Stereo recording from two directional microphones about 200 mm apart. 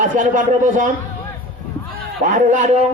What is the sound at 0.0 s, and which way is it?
Speech, 40° right (ahead or behind).